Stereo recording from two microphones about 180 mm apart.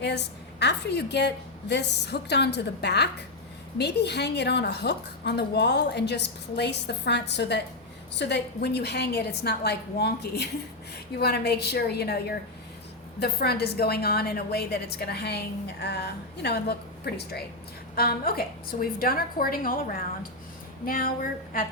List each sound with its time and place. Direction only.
0.0 s a woman's voice: 70° left (ahead or behind); by 21.6 s 50° left (ahead or behind)